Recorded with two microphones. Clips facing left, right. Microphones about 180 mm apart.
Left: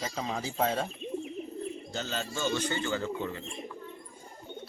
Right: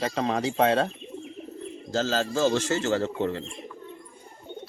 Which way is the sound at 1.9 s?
90° right.